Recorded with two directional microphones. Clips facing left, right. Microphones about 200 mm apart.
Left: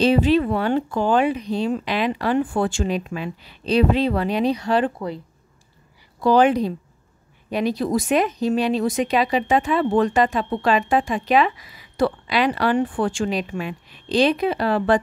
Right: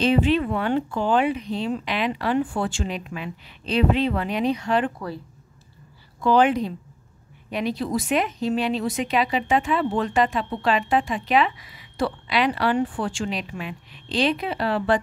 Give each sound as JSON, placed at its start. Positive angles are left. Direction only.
{"t": 0.0, "sound": "speech", "side_deg": 35}
{"t": 6.2, "sound": "speech", "side_deg": 40}